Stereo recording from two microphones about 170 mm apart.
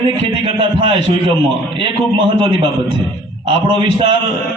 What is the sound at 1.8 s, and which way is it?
Speech, 30° right (ahead or behind).